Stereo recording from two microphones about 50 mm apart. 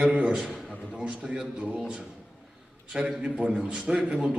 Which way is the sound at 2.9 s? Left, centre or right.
Centre.